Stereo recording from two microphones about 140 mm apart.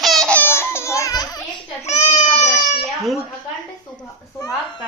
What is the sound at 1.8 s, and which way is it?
Speech, 55° left (ahead or behind).